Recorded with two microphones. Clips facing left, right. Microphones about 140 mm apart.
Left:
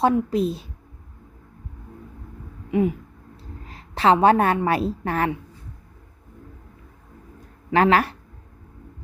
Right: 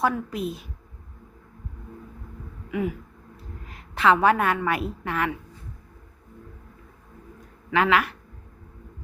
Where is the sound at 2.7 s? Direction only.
30° left (ahead or behind).